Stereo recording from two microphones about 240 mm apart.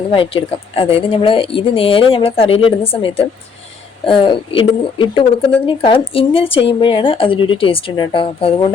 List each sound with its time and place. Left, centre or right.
0.1 s speech: left